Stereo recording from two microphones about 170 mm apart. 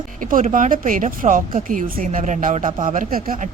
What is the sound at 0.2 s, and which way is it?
Speech, 50° right (ahead or behind).